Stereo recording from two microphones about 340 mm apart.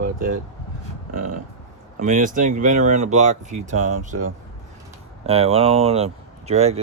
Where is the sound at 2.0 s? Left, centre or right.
Right.